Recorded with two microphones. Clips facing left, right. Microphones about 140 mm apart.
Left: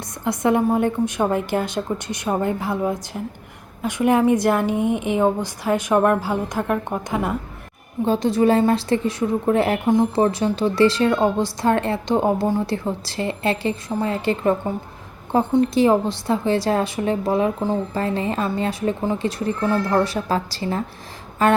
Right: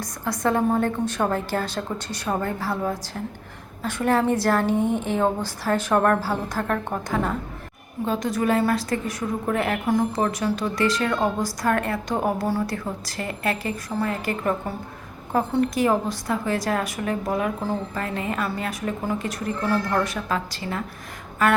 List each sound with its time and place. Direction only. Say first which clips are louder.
0.0 s a woman's voice: left 3 dB; 20° left (ahead or behind)
8.0 s a woman's voice: left 6 dB; 30° left (ahead or behind)